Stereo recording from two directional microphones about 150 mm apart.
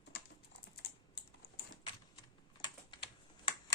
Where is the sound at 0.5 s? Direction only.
90° left.